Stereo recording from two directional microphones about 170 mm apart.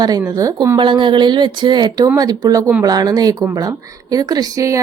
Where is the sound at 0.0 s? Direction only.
20° right (ahead or behind).